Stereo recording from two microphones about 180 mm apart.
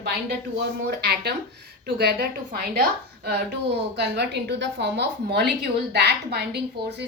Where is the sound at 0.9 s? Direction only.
60° right (ahead or behind).